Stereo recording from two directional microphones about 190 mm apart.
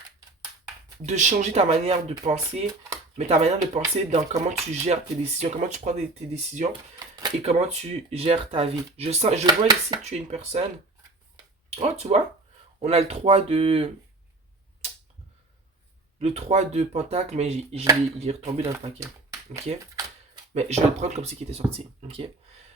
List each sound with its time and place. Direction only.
1.0 s speech: 40° right (ahead or behind)
7.0 s a sound: 20° right (ahead or behind)
7.4 s speech: 35° right (ahead or behind)
9.5 s speech: 20° right (ahead or behind)
10.0 s speech: 35° right (ahead or behind)
11.7 s speech: 35° right (ahead or behind)
16.1 s speech: 35° right (ahead or behind)
20.5 s speech: 35° right (ahead or behind)